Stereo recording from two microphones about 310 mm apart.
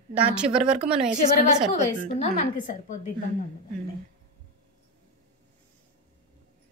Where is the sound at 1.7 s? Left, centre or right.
Left.